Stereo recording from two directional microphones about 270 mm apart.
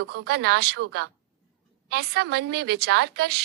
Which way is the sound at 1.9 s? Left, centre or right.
Right.